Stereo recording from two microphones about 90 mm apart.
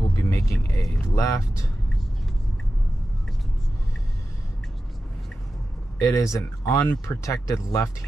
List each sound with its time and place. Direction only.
0.1 s vehicle: 30° left (ahead or behind)
1.0 s speech: 40° left (ahead or behind)
5.9 s speech: 35° left (ahead or behind)